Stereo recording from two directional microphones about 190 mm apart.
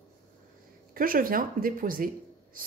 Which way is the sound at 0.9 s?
50° right (ahead or behind).